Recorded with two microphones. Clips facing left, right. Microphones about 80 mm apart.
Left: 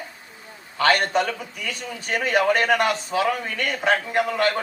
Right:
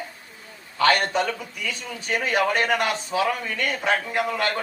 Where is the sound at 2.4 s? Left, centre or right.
Right.